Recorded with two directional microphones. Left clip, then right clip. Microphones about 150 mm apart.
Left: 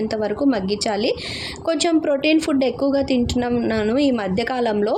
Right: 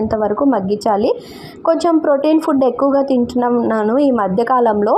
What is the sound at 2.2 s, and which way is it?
A woman's voice, 15° right (ahead or behind).